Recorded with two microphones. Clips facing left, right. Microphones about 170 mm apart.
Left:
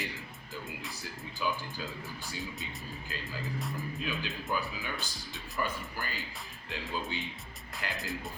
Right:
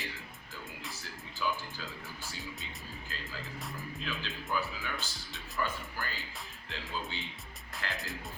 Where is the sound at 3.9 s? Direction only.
15° left (ahead or behind).